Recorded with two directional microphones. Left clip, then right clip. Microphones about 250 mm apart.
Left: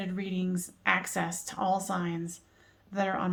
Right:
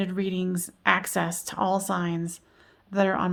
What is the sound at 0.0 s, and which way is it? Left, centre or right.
Speech, right.